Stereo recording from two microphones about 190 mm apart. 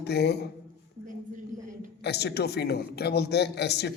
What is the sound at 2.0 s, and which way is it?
A man's voice, 60° left (ahead or behind).